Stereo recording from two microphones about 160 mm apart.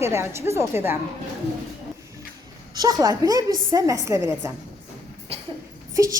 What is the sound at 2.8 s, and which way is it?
Speech, 25° right (ahead or behind).